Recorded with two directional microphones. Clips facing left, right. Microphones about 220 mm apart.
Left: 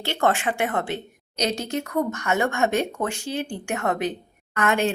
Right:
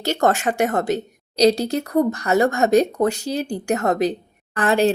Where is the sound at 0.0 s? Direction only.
40° right (ahead or behind).